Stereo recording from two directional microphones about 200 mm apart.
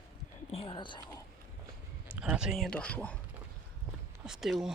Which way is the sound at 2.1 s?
5° right (ahead or behind).